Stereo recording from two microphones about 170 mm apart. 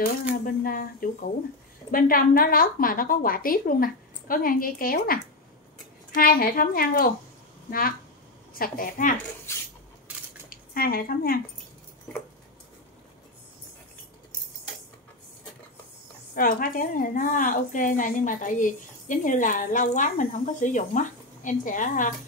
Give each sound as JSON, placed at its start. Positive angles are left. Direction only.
{"t": 0.0, "sound": "a woman's voice", "side_deg": 60}
{"t": 1.9, "sound": "a woman's voice", "side_deg": 55}
{"t": 8.5, "sound": "a woman's voice", "side_deg": 55}
{"t": 9.5, "sound": "a sound", "side_deg": 15}
{"t": 10.1, "sound": "crushing", "side_deg": -10}
{"t": 10.5, "sound": "speech", "side_deg": 60}
{"t": 16.3, "sound": "a woman's voice", "side_deg": 60}